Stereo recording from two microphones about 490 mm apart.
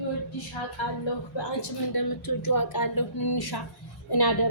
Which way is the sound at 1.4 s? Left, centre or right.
Left.